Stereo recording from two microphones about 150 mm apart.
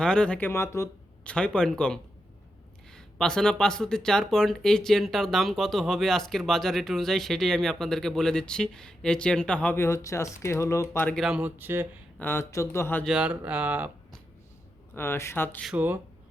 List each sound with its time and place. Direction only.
0.0 s speech: 5° left (ahead or behind)
1.2 s speech: 5° left (ahead or behind)
11.1 s speech: 5° right (ahead or behind)
12.2 s speech: 15° left (ahead or behind)
13.1 s speech: 5° right (ahead or behind)
14.9 s speech: 15° left (ahead or behind)
15.6 s speech: 10° right (ahead or behind)